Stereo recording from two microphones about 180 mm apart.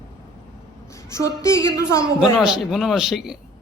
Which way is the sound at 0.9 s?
15° left (ahead or behind).